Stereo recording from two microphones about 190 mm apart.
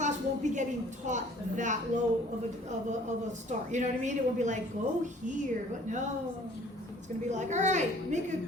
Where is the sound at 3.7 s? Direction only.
40° right (ahead or behind).